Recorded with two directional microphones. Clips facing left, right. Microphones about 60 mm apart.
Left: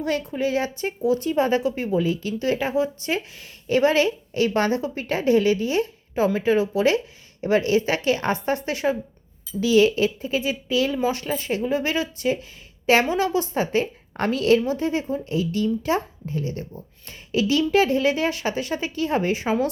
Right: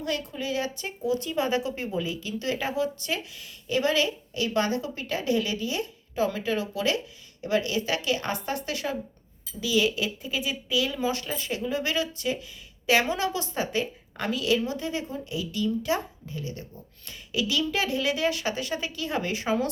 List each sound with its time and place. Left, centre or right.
0.0 s a woman's voice: left
14.2 s a woman's voice: left